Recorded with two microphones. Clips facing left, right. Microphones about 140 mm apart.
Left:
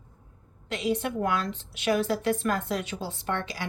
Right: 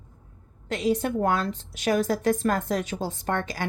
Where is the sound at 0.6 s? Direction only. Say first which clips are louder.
Right 3 dB; 45° right (ahead or behind).